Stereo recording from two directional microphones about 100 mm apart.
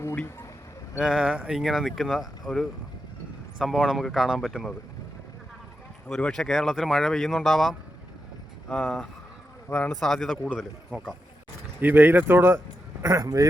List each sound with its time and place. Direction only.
0.9 s speech: 5° right (ahead or behind)
6.1 s speech: 5° left (ahead or behind)
11.8 s speech: 20° right (ahead or behind)